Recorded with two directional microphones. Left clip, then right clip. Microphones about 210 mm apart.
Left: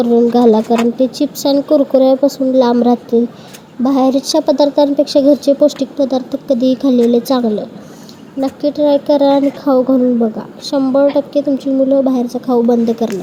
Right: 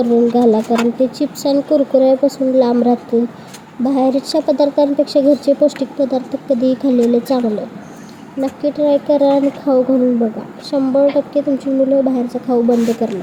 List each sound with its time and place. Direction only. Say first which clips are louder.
0.0 s speech: left 2 dB; 30° left (ahead or behind)